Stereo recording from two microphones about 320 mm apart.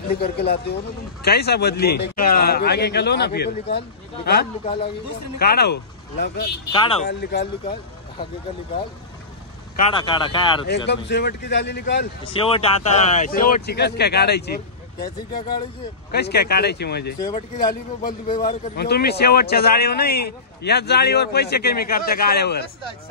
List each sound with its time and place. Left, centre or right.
0.1 s a man's voice: left
5.4 s a man's voice: left
6.7 s speech: centre
7.1 s a man's voice: left
9.8 s speech: centre
10.9 s a man's voice: left
12.3 s speech: centre
15.0 s speech: centre
16.1 s a man's voice: left
17.2 s speech: centre
18.8 s a man's voice: left